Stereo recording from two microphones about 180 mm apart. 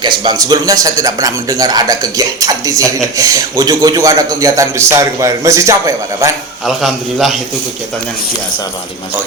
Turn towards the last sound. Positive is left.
turn(degrees=0)  # may be behind; listen again after turning